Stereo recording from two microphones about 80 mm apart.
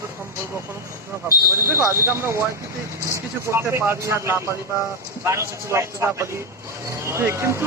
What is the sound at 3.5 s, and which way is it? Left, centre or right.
Speech, right.